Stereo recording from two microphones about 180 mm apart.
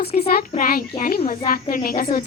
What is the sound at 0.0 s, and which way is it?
A child's voice, 60° left (ahead or behind).